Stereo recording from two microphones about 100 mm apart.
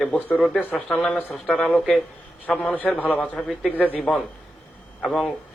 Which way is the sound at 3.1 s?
10° left (ahead or behind).